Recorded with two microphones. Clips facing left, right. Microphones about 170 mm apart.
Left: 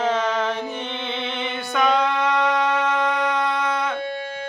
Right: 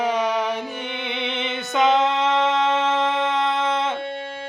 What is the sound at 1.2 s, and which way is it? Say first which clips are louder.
Music: right 1 dB; 20° right (ahead or behind).